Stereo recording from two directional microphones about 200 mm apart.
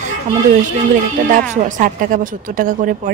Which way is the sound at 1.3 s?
40° right (ahead or behind).